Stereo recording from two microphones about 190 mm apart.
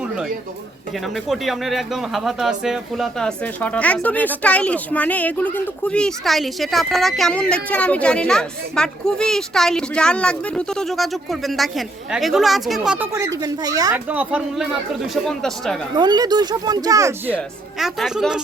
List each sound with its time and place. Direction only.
1.0 s speech: centre (ahead or behind)
13.1 s speech: 15° right (ahead or behind)
13.9 s speech: 10° right (ahead or behind)
16.0 s speech: 20° right (ahead or behind); by 18.3 s centre (ahead or behind)